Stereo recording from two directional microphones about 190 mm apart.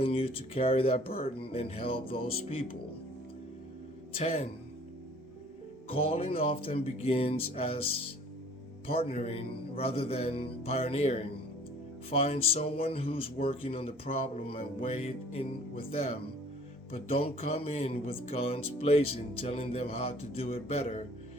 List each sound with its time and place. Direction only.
0.0 s speech: 30° left (ahead or behind)
4.2 s speech: 35° left (ahead or behind)
6.1 s speech: 30° left (ahead or behind)
8.9 s speech: 30° left (ahead or behind)